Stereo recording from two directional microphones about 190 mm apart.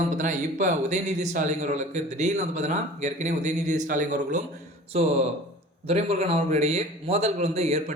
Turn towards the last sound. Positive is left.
turn(degrees=-35)  # may be behind; listen again after turning